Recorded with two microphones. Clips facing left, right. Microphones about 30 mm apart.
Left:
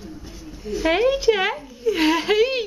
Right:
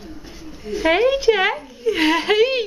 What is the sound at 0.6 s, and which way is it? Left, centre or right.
A man's voice, centre.